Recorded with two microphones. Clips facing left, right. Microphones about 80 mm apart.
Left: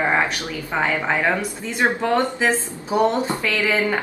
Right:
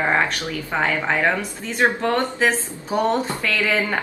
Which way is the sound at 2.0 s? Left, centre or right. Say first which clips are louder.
Left 1 dB; centre.